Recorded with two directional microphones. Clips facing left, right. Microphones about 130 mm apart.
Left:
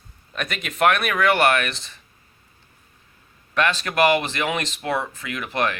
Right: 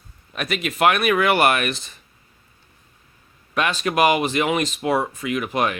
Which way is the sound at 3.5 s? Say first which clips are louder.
Right 1 dB; 15° right (ahead or behind).